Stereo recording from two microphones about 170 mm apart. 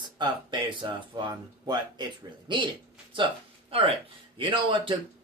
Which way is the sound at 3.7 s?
35° right (ahead or behind).